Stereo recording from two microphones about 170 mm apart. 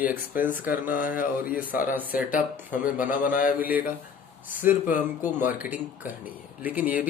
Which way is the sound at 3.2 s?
55° left (ahead or behind).